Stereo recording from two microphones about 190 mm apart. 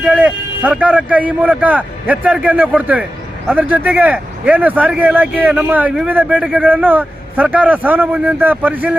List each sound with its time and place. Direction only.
0.0 s speech: 5° right (ahead or behind)